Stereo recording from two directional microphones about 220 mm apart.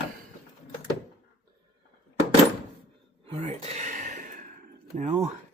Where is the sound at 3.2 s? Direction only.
30° right (ahead or behind).